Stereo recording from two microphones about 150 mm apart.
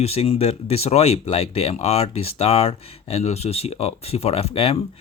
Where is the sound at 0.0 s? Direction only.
45° left (ahead or behind).